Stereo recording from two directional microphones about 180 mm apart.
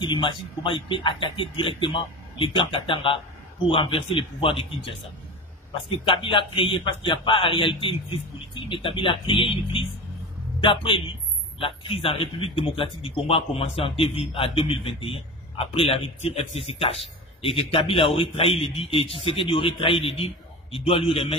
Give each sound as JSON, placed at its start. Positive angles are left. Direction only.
{"t": 0.0, "sound": "a man's voice", "side_deg": 25}